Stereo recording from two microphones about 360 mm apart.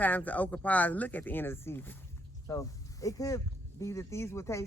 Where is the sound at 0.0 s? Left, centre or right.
Centre.